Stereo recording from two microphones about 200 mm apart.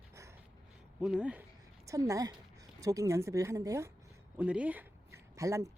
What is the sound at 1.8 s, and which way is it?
Speech, 15° right (ahead or behind).